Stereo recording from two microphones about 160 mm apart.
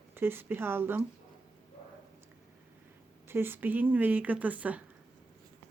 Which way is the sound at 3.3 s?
15° right (ahead or behind).